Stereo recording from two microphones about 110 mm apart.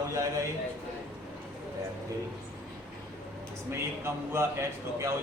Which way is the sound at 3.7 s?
25° right (ahead or behind).